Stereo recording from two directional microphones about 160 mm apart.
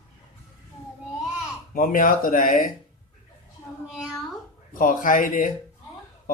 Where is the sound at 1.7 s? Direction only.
60° left (ahead or behind).